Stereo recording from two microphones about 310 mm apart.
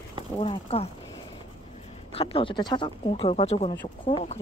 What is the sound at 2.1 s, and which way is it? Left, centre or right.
Speech, centre.